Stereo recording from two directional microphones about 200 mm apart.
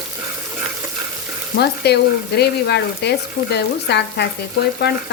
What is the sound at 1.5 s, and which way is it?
Frying, 55° left (ahead or behind).